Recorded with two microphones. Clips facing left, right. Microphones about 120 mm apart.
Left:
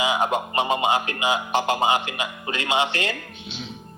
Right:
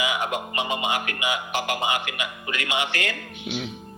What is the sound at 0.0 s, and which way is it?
Speech, 30° left (ahead or behind).